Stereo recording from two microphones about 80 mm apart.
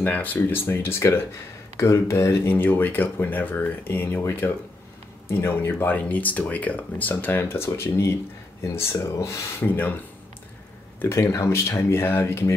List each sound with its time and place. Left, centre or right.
0.0 s speech: left
5.8 s speech: left
9.6 s speech: left
11.0 s speech: left